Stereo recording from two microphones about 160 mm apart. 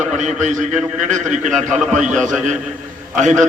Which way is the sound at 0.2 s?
50° right (ahead or behind).